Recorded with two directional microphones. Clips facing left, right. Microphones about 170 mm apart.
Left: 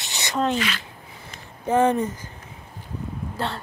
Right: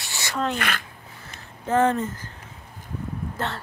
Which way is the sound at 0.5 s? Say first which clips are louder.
Left 2 dB; 55° right (ahead or behind).